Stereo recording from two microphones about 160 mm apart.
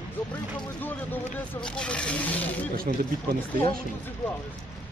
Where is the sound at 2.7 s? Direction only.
65° right (ahead or behind).